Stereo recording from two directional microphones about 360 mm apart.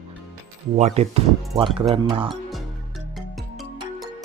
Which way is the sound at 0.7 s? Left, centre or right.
Centre.